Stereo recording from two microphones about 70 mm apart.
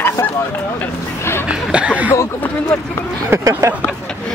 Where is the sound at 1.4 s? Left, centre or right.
Centre.